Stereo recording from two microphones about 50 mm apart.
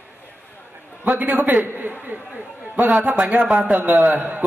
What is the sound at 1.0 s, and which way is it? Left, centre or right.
Speech, right.